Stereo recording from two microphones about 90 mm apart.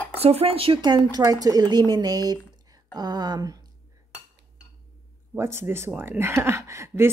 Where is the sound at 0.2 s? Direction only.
90° right.